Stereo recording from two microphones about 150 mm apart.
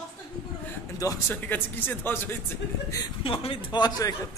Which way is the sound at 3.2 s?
35° left (ahead or behind).